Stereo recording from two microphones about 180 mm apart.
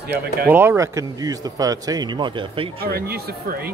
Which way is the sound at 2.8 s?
55° right (ahead or behind).